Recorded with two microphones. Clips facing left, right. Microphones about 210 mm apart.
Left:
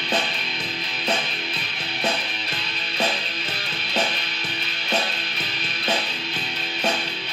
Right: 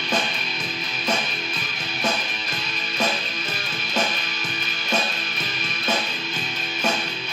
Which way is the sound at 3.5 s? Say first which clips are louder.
Even; 35° left (ahead or behind).